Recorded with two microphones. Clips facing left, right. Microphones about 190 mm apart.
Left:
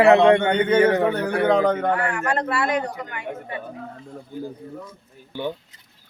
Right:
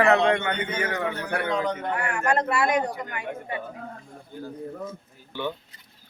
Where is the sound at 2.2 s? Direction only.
20° right (ahead or behind).